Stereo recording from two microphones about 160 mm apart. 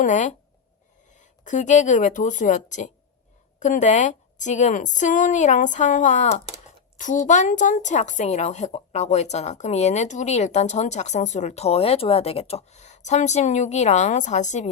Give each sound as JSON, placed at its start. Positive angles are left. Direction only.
{"t": 0.0, "sound": "a woman's voice", "side_deg": 50}